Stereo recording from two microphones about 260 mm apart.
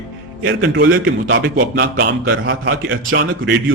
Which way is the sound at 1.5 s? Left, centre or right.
Right.